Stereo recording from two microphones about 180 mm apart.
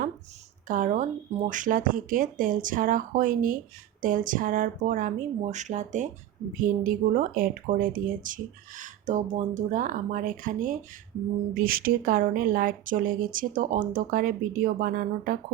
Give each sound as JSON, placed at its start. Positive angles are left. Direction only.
{"t": 0.7, "sound": "speech", "side_deg": -45}